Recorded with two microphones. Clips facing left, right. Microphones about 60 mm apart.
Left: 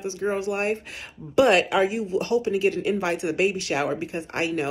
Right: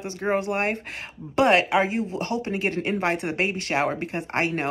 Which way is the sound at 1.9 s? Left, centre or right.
Right.